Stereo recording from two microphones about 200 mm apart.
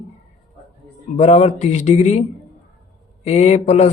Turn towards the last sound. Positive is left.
turn(degrees=30)  # may be behind; listen again after turning